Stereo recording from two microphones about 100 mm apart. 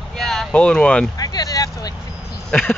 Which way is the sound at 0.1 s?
5° left (ahead or behind).